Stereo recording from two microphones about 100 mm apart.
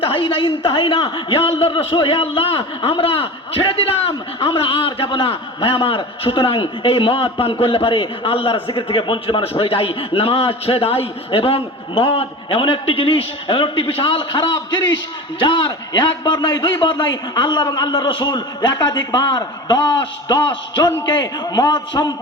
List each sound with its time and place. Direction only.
0.1 s a man's voice: 60° left (ahead or behind)
14.3 s a man's voice: 50° left (ahead or behind)